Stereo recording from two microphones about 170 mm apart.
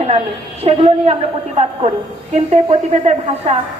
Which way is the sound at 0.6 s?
35° right (ahead or behind).